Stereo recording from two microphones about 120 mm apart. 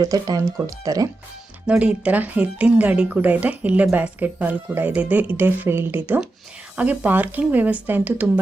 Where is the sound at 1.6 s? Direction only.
10° right (ahead or behind).